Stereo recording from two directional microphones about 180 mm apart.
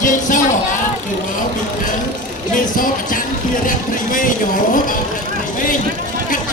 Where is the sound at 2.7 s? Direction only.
50° left (ahead or behind).